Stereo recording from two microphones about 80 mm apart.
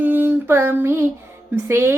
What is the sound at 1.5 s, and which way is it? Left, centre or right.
Female singing, right.